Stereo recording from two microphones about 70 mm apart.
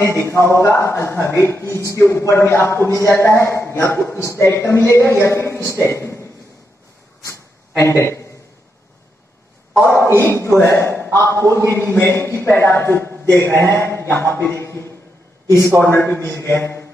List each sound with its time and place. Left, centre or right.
0.0 s a man's voice: left
7.8 s a man's voice: left
10.1 s a man's voice: left